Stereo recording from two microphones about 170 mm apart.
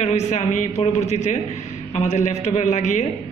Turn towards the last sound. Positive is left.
turn(degrees=45)  # may be behind; listen again after turning